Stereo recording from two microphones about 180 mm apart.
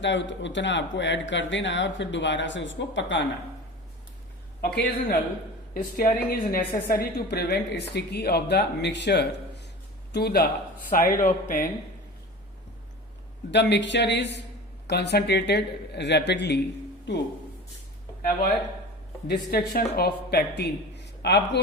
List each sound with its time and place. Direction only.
0.0 s speech: 85° left
4.6 s a woman's voice: 60° left (ahead or behind)
5.7 s a woman's voice: 50° left (ahead or behind)
13.5 s speech: 75° left (ahead or behind)
19.3 s speech: 60° left (ahead or behind)